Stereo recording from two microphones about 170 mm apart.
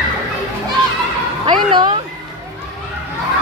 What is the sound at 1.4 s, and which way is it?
Speech, 30° right (ahead or behind).